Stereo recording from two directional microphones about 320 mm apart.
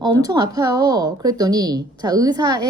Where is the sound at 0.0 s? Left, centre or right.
Centre.